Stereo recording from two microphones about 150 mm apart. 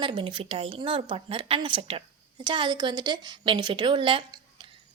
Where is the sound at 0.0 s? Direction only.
35° right (ahead or behind).